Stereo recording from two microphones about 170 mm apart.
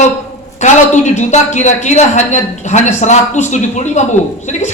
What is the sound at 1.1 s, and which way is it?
A man's voice, 45° left (ahead or behind).